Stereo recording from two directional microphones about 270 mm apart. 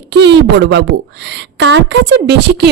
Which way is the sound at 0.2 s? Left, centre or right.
Right.